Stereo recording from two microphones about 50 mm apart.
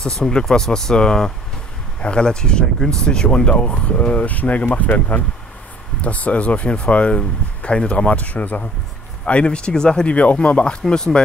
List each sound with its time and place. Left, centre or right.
0.0 s speech: centre
10.0 s speech: left